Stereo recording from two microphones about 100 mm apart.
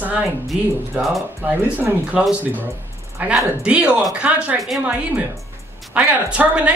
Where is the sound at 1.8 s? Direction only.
15° right (ahead or behind).